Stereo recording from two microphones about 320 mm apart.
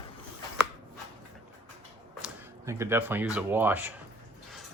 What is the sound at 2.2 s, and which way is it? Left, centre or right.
Speech, centre.